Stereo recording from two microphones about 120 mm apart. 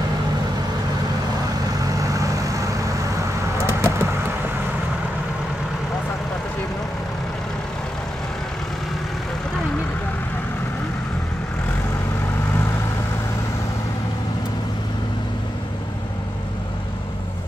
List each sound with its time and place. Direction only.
1.8 s vehicle: 25° right (ahead or behind)